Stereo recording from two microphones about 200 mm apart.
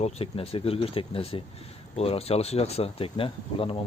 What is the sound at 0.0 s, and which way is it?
Speech, 30° left (ahead or behind).